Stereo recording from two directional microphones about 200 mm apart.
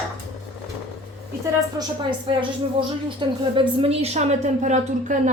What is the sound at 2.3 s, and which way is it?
A woman's voice, 25° right (ahead or behind).